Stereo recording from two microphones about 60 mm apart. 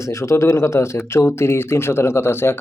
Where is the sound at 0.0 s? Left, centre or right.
Left.